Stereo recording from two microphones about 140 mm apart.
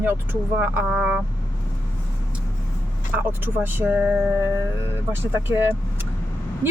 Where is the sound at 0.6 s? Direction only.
10° right (ahead or behind).